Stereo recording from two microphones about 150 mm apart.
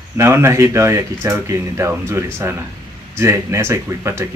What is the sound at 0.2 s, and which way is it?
Speech, 20° right (ahead or behind).